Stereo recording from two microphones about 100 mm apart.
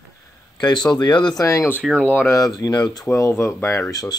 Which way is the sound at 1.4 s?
30° left (ahead or behind).